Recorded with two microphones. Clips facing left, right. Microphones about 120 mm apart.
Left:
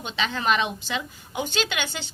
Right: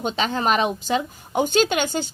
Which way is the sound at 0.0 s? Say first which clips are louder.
Right 5 dB; 40° right (ahead or behind).